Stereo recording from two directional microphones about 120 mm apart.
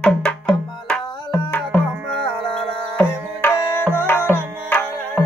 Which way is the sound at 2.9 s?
15° left (ahead or behind).